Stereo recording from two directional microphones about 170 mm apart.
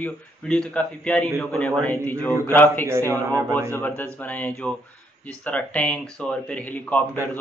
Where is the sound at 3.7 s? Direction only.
10° left (ahead or behind).